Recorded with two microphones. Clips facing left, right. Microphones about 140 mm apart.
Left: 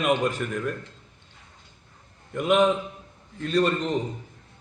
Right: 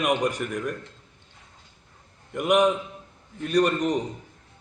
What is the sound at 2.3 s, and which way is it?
A man's voice, 10° right (ahead or behind).